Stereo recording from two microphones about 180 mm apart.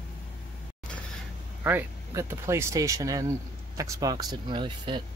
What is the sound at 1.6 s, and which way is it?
Speech, 10° right (ahead or behind).